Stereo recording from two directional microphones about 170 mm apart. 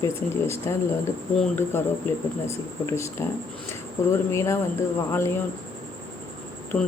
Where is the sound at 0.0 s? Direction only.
15° left (ahead or behind).